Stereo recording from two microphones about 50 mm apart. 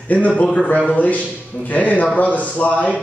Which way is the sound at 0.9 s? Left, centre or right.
Left.